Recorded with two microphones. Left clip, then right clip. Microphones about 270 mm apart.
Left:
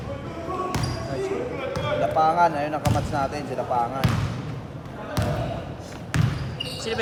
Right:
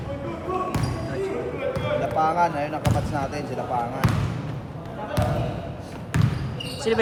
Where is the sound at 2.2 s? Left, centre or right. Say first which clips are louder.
Left 2 dB; left.